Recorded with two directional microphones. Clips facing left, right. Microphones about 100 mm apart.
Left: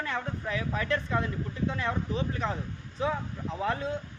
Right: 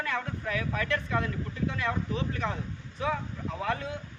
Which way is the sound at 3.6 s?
30° left (ahead or behind).